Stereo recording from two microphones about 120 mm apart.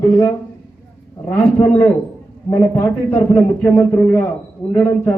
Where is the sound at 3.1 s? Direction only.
15° left (ahead or behind).